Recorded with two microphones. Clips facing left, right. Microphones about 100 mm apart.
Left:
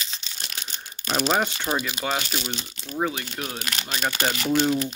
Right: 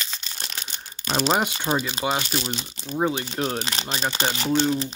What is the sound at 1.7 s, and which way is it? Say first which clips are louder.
Speech: right 3 dB; 35° right (ahead or behind).